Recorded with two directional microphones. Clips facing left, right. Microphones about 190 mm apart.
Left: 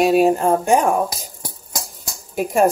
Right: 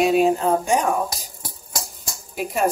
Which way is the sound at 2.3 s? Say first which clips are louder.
Left 5 dB; 45° left (ahead or behind).